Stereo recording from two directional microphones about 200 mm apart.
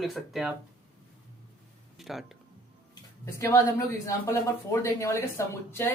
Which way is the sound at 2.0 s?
Centre (ahead or behind).